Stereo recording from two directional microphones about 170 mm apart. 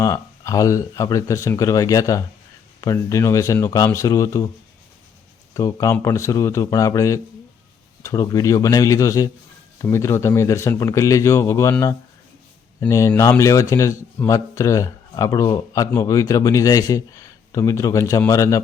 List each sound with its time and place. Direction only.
0.0 s speech: 20° left (ahead or behind)
5.5 s speech: 20° left (ahead or behind)